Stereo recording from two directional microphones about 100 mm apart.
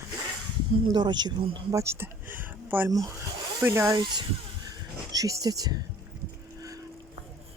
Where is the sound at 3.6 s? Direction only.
25° right (ahead or behind).